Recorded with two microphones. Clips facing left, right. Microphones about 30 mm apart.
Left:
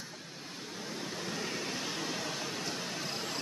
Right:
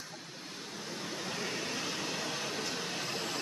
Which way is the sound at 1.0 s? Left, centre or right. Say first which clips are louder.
Even; centre.